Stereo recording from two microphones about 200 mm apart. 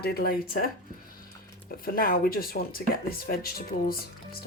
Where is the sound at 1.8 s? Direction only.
45° left (ahead or behind).